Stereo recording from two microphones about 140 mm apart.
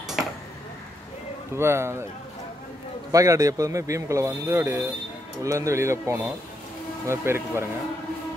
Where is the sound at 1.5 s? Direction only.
20° right (ahead or behind).